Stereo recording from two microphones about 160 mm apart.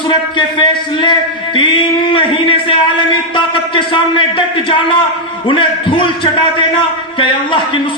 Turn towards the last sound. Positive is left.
turn(degrees=30)  # may be behind; listen again after turning